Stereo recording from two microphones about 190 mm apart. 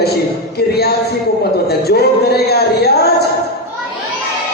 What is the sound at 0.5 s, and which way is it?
Speech, 55° left (ahead or behind).